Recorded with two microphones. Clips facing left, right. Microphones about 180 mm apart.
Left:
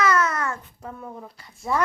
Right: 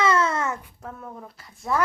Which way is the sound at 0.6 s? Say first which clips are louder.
Left 1 dB; 10° right (ahead or behind).